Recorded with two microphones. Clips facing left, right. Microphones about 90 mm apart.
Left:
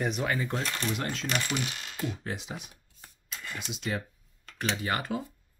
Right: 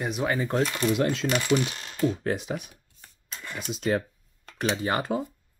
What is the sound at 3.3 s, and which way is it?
Speech, 40° right (ahead or behind).